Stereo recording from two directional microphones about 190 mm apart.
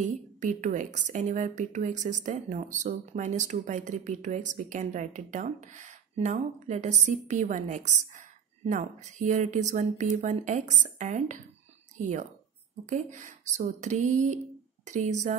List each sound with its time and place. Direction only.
0.0 s speech: 40° right (ahead or behind)